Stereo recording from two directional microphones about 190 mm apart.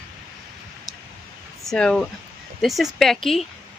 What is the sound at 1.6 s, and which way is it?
Speech, 5° left (ahead or behind).